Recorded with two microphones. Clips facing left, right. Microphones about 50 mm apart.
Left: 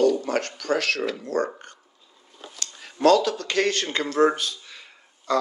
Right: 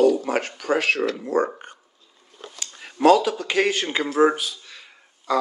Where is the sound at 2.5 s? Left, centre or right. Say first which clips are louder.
Right 2 dB; centre.